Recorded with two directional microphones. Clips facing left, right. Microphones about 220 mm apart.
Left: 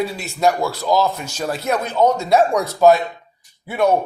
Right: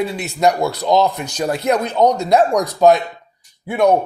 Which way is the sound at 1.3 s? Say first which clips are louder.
Right 4 dB; centre (ahead or behind).